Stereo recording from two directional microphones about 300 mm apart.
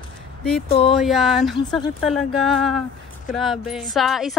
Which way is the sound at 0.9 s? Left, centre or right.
Centre.